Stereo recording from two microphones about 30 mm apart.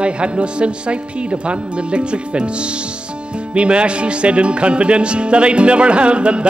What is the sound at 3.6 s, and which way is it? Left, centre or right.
Music, right.